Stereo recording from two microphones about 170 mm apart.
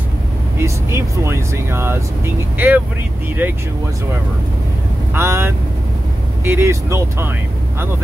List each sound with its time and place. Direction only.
0.6 s speech: 15° right (ahead or behind)
5.1 s speech: 15° right (ahead or behind)